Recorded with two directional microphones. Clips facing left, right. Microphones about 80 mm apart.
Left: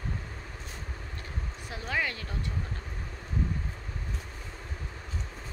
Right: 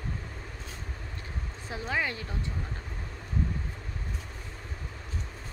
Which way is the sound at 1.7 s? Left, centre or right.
Right.